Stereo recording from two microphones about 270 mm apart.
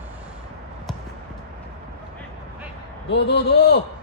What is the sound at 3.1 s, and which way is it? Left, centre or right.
Speech, left.